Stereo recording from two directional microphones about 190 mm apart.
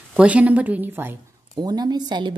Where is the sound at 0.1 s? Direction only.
5° right (ahead or behind).